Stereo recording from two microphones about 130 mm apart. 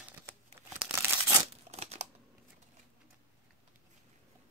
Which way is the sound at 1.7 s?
55° right (ahead or behind).